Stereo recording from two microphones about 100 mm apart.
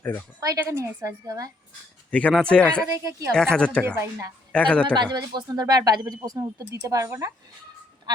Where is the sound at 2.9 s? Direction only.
35° right (ahead or behind).